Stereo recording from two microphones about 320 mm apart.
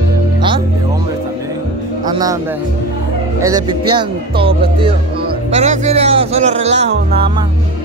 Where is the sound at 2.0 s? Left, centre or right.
Centre.